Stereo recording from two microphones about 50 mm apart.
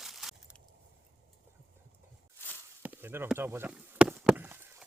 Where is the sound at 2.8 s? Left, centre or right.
Right.